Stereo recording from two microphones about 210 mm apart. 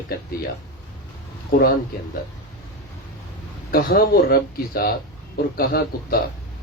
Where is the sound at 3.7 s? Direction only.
45° left (ahead or behind).